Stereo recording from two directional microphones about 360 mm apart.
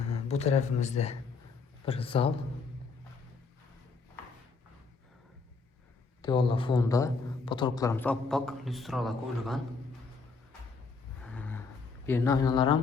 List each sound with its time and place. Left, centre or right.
0.3 s a man's voice: centre
6.2 s a man's voice: centre
11.3 s a sound: centre
12.0 s a man's voice: centre